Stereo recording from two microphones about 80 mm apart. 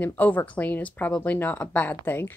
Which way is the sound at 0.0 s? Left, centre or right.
Left.